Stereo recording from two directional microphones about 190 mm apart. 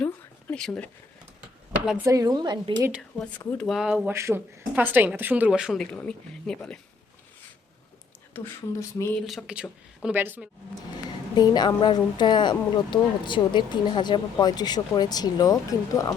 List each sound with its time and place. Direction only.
0.0 s a sound: 5° left (ahead or behind)
1.9 s speech: 10° right (ahead or behind)
2.9 s speech: centre (ahead or behind)
8.3 s speech: 15° left (ahead or behind)
9.2 s speech: centre (ahead or behind)
11.3 s speech: 20° left (ahead or behind)